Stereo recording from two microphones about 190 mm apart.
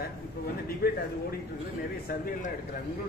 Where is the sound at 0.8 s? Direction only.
50° left (ahead or behind).